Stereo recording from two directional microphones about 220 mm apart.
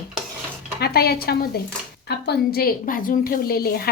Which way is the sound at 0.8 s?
45° left (ahead or behind).